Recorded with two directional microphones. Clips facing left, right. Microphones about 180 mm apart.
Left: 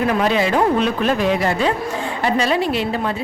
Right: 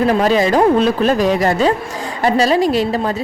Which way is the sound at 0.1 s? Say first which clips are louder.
Right 4 dB; 40° right (ahead or behind).